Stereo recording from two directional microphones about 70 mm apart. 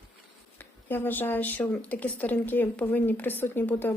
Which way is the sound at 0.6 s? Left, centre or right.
Left.